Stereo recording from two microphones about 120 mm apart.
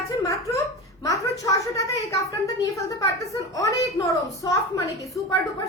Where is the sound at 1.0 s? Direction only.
30° left (ahead or behind).